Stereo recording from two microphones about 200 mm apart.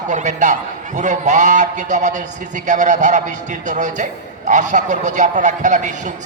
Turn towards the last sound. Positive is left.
turn(degrees=-35)  # may be behind; listen again after turning